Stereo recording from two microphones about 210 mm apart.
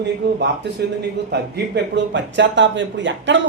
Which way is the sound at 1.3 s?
55° right (ahead or behind).